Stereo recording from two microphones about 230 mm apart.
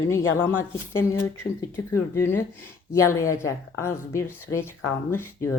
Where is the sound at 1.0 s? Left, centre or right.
Centre.